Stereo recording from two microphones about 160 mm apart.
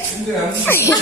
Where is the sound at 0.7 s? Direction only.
15° left (ahead or behind).